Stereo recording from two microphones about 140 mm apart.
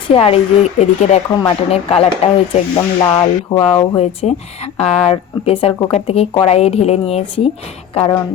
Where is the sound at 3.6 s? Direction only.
40° left (ahead or behind).